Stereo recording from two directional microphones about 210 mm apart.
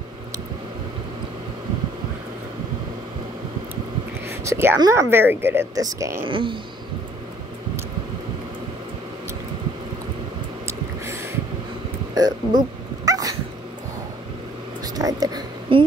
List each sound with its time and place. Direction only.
4.3 s a woman's voice: 10° right (ahead or behind)
12.2 s dog: 20° right (ahead or behind)
15.0 s a sound: 20° right (ahead or behind)